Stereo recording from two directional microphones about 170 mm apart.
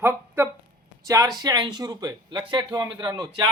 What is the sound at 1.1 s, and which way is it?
Speech, 20° right (ahead or behind).